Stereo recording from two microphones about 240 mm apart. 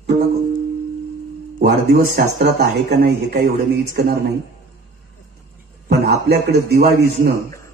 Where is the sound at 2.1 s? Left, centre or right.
Right.